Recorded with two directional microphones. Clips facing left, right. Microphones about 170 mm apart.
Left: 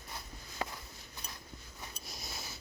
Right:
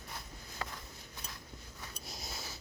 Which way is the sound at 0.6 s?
15° left (ahead or behind).